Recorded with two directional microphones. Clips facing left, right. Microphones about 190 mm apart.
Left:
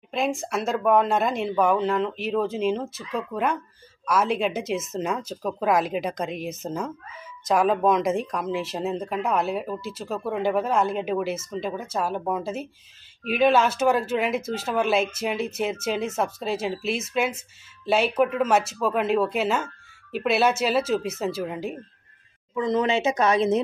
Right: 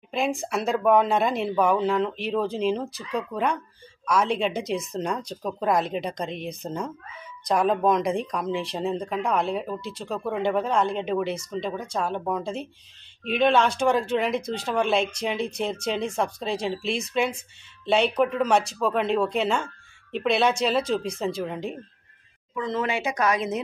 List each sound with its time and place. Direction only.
0.1 s speech: centre (ahead or behind)
22.6 s speech: 20° left (ahead or behind)